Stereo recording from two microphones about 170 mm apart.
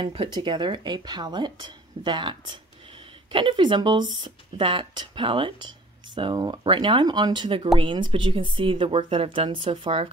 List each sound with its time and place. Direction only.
0.0 s speech: 30° right (ahead or behind)